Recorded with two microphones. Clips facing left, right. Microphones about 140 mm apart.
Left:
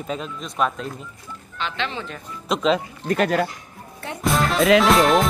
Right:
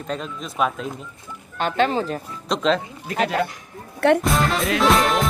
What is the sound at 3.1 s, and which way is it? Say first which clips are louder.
Speech: left 2 dB; 50° left (ahead or behind).